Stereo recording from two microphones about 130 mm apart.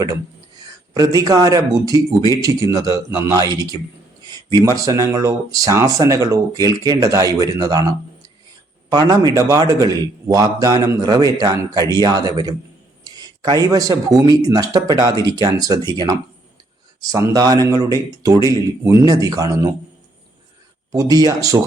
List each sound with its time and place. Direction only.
0.9 s speech: 30° right (ahead or behind)
20.9 s speech: 25° right (ahead or behind)